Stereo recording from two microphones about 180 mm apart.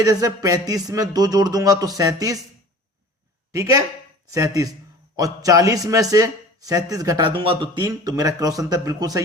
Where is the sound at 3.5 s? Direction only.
20° right (ahead or behind).